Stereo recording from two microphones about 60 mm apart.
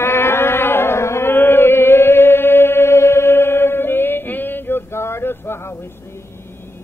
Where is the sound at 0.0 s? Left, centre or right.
Left.